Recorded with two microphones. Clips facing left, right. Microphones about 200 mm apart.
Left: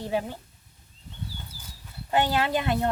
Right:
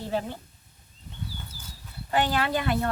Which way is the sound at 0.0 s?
15° left (ahead or behind).